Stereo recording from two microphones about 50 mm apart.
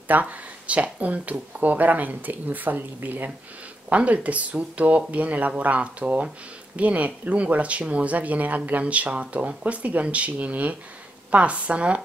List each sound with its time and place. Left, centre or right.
0.1 s speech: right